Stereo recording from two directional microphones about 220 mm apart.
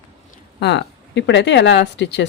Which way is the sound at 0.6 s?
55° left (ahead or behind).